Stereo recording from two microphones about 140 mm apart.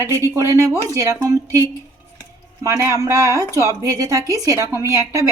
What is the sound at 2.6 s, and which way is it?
A woman's voice, 20° right (ahead or behind).